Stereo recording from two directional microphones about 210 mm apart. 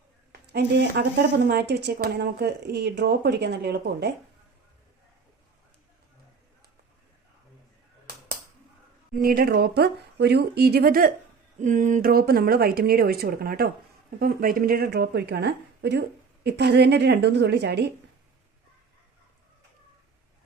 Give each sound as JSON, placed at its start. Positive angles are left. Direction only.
{"t": 0.4, "sound": "a woman's voice", "side_deg": -55}
{"t": 9.1, "sound": "speech", "side_deg": -45}